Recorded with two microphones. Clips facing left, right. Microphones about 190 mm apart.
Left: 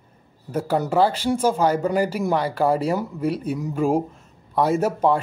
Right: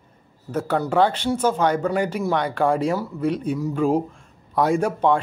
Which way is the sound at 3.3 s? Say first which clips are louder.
Right 2 dB; 5° left (ahead or behind).